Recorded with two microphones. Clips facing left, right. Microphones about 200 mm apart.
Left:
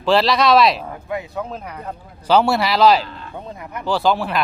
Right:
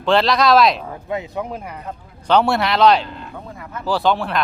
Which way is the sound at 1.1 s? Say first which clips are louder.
Right 1 dB; 15° right (ahead or behind).